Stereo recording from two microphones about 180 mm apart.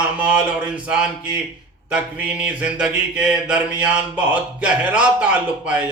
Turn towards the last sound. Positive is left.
turn(degrees=-10)  # may be behind; listen again after turning